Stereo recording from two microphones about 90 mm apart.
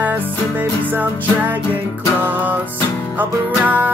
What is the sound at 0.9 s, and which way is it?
Music, 20° right (ahead or behind).